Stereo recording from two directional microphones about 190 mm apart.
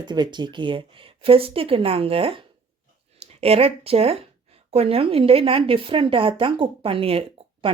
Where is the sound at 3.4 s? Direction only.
30° right (ahead or behind).